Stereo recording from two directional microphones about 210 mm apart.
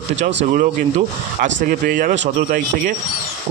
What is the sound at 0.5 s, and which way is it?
Speech, 35° right (ahead or behind).